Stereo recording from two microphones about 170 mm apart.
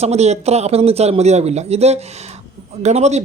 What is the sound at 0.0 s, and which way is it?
A man's voice, 40° right (ahead or behind).